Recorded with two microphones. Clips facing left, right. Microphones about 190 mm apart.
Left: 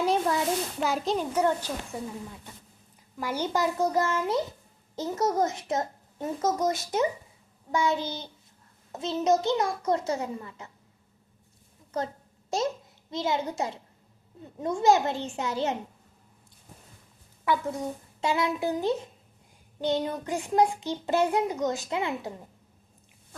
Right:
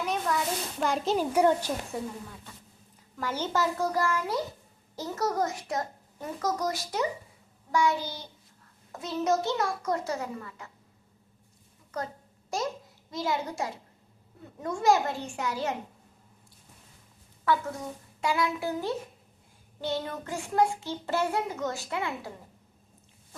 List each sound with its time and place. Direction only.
0.0 s a sound: 30° left (ahead or behind)
0.8 s a child's voice: centre (ahead or behind)
3.2 s child singing: 10° left (ahead or behind)
12.5 s child singing: 25° left (ahead or behind)
17.4 s child singing: 20° left (ahead or behind)